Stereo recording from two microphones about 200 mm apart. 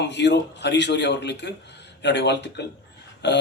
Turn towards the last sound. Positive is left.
turn(degrees=60)  # may be behind; listen again after turning